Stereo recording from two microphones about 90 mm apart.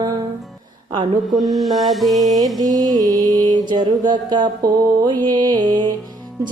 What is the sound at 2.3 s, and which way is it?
Music, 45° right (ahead or behind).